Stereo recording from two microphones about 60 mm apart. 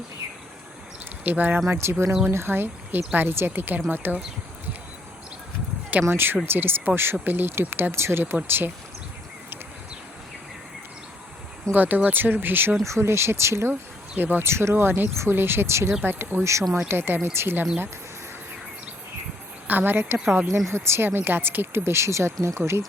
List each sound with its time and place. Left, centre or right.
1.2 s speech: right
1.7 s speech: right
6.1 s speech: right
11.7 s speech: right
12.8 s speech: right
14.2 s speech: right
16.0 s speech: right
16.4 s speech: right
16.9 s speech: right
19.6 s speech: right